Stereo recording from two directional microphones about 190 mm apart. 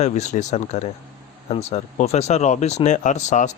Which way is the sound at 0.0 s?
35° left (ahead or behind).